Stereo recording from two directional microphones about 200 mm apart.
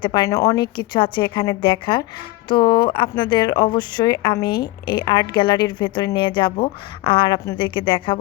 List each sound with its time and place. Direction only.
0.0 s a woman's voice: 20° left (ahead or behind)